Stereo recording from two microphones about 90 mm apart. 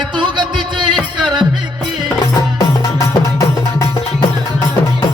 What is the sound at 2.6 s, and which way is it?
Music, 40° left (ahead or behind).